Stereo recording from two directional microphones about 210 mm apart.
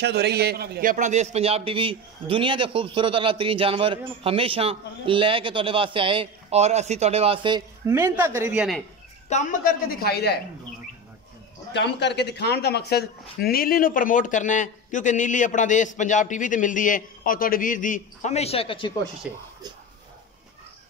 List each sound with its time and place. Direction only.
0.0 s a man's voice: 50° right (ahead or behind); by 8.6 s 10° right (ahead or behind)
9.3 s a woman's voice: 35° left (ahead or behind)
11.7 s speech: 55° left (ahead or behind); by 18.9 s 25° left (ahead or behind)
19.2 s speech: 5° right (ahead or behind)